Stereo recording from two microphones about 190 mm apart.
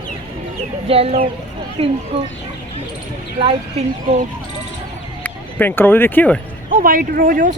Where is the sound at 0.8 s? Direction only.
30° right (ahead or behind).